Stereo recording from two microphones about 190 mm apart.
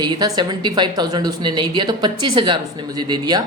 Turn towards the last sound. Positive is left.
turn(degrees=-20)  # may be behind; listen again after turning